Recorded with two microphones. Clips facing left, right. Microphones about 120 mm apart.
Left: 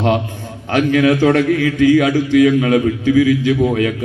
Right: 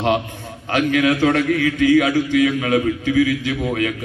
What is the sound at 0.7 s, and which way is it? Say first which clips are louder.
A man's voice: left 4 dB; 30° left (ahead or behind).